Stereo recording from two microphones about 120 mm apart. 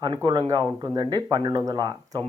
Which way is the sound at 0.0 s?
40° right (ahead or behind).